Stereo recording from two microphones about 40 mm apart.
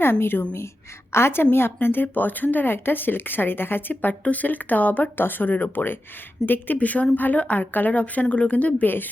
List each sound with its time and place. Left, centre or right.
0.0 s a woman's voice: left
1.1 s a woman's voice: left
1.5 s speech: left
2.7 s speech: left
4.1 s speech: left
6.7 s speech: left